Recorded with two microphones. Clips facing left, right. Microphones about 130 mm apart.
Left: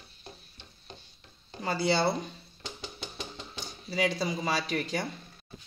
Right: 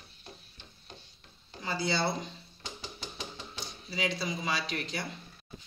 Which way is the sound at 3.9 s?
40° left (ahead or behind).